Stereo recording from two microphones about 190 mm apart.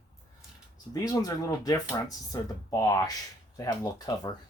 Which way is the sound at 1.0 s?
20° left (ahead or behind).